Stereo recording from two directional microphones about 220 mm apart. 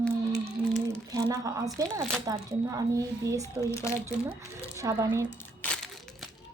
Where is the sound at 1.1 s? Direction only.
15° right (ahead or behind).